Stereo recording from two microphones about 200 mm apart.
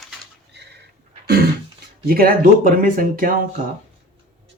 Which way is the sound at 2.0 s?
50° right (ahead or behind).